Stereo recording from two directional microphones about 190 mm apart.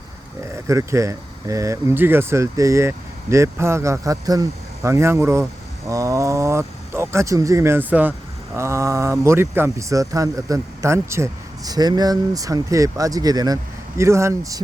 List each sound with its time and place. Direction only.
0.5 s speech: 15° right (ahead or behind)